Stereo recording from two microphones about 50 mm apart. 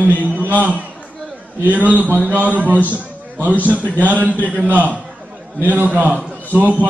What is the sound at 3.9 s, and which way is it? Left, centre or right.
A man's voice, right.